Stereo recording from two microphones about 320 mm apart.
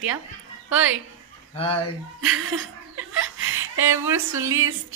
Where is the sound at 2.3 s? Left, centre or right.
Right.